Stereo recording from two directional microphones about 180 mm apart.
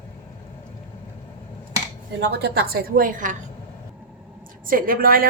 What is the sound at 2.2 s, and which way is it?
A woman's voice, 65° right (ahead or behind).